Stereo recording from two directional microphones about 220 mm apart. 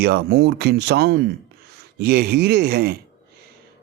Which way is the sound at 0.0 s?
45° right (ahead or behind).